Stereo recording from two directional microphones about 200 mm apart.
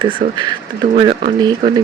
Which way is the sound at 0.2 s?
40° right (ahead or behind).